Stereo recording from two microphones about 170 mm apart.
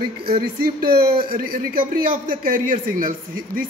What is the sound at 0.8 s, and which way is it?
A man's voice, 60° right (ahead or behind).